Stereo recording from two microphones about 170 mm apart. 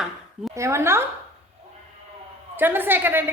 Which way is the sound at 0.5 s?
15° right (ahead or behind).